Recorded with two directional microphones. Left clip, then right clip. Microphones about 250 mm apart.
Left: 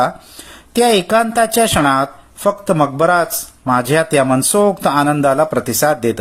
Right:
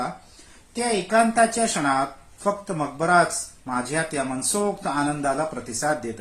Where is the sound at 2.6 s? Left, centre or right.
Left.